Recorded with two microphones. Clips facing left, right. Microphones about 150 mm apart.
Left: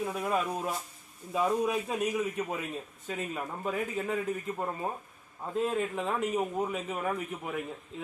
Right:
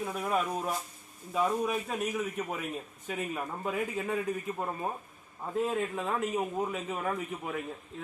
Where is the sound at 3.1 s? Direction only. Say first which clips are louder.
Right 1 dB; 5° right (ahead or behind).